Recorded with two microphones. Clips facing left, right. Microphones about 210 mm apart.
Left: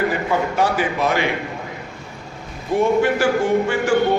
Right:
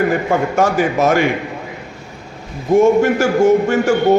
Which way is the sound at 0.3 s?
45° right (ahead or behind).